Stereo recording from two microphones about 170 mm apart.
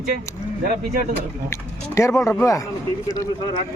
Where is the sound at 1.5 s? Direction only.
15° left (ahead or behind).